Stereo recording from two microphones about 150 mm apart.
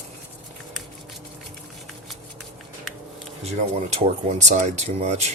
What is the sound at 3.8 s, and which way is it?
Speech, 45° right (ahead or behind).